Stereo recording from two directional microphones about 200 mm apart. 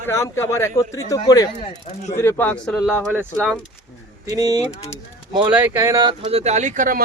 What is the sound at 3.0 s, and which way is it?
Speech, 10° right (ahead or behind).